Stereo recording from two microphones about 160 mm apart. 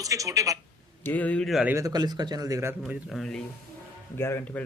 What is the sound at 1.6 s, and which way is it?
Speech, 20° right (ahead or behind).